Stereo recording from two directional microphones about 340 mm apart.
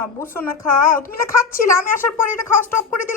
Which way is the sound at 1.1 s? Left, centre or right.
Left.